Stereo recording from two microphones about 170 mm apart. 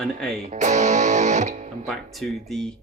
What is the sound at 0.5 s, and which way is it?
Music, 45° right (ahead or behind).